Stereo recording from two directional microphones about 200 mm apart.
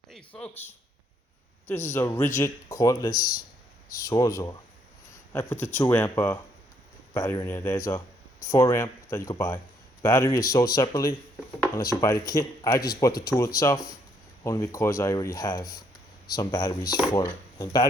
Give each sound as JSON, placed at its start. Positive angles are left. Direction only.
{"t": 0.1, "sound": "speech", "side_deg": 5}